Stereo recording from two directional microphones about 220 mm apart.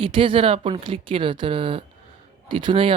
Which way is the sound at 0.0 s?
25° right (ahead or behind).